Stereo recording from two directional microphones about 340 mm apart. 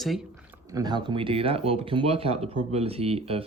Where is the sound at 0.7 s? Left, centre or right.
Centre.